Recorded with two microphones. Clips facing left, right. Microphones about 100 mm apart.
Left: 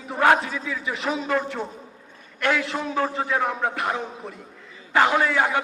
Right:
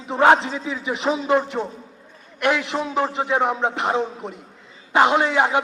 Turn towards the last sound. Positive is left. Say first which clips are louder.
# right 3 dB
turn(degrees=-20)  # may be behind; listen again after turning